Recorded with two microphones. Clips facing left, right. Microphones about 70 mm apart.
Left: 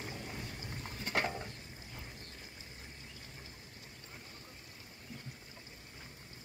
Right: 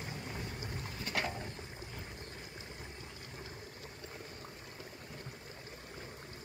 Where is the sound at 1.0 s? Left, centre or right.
Left.